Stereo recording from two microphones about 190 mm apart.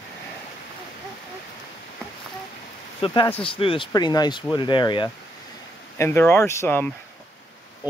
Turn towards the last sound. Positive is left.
turn(degrees=10)  # may be behind; listen again after turning